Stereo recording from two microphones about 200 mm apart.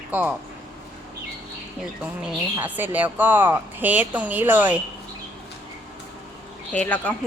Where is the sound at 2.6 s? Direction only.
10° right (ahead or behind).